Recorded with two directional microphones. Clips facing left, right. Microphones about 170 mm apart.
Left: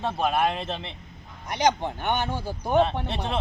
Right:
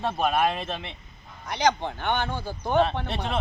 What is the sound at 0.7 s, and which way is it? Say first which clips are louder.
Speech: left 1 dB; 25° left (ahead or behind).